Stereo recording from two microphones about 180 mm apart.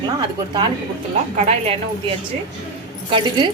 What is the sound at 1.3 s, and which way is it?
A woman's voice, 35° right (ahead or behind).